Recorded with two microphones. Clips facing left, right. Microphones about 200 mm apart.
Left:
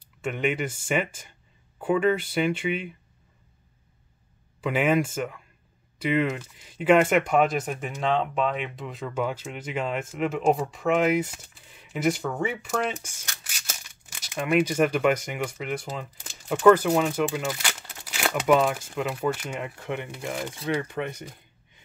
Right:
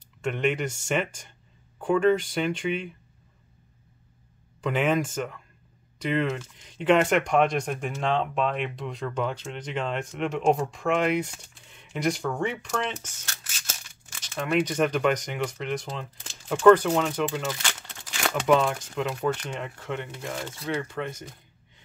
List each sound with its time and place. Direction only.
0.2 s speech: 5° left (ahead or behind)
4.6 s speech: 5° left (ahead or behind)